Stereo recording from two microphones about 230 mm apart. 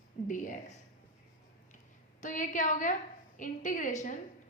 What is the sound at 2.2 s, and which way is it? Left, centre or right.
A woman's voice, left.